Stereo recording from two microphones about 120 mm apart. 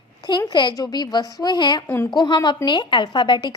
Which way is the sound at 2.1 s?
35° left (ahead or behind).